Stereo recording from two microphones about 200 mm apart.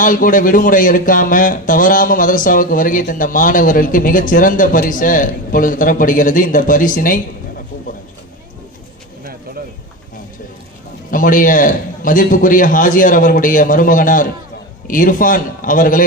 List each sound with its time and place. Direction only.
0.0 s speech: 40° left (ahead or behind)
11.1 s speech: 45° left (ahead or behind)